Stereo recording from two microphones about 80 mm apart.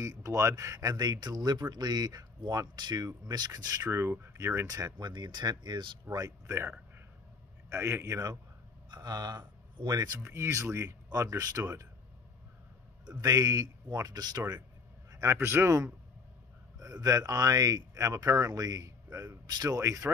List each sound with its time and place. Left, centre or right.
0.0 s speech: right
3.9 s speech: right
4.9 s speech: right
6.1 s speech: right
7.7 s speech: right
8.9 s a sound: right
9.8 s speech: right
10.2 s speech: right
11.1 s speech: right
13.2 s speech: right
15.0 s speech: right
16.8 s speech: right